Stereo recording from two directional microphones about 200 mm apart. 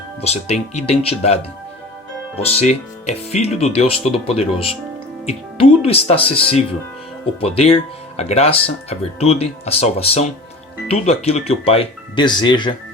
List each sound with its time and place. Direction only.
0.2 s speech: 30° left (ahead or behind)
2.6 s speech: 35° left (ahead or behind)